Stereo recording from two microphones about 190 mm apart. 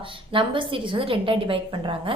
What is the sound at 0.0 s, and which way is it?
A woman's voice, 25° right (ahead or behind).